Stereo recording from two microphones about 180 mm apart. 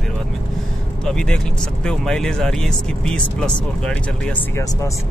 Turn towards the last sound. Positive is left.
turn(degrees=5)  # may be behind; listen again after turning